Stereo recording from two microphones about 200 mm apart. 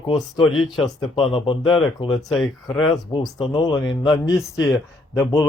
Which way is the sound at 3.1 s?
25° left (ahead or behind).